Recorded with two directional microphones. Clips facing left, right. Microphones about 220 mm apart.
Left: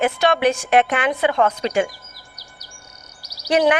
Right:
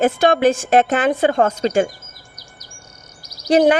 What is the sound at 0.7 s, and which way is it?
Speech, 35° right (ahead or behind).